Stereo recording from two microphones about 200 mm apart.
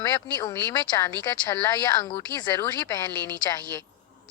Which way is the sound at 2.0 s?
20° left (ahead or behind).